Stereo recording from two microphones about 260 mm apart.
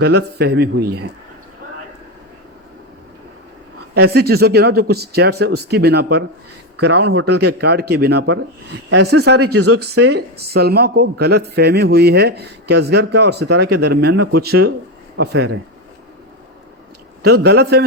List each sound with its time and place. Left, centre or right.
0.0 s speech: right
3.9 s speech: right
9.4 s speech: right
9.8 s speech: right
17.2 s speech: right